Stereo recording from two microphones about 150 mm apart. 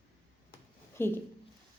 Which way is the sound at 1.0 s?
15° left (ahead or behind).